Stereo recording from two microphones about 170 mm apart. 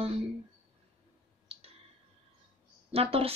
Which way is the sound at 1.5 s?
35° right (ahead or behind).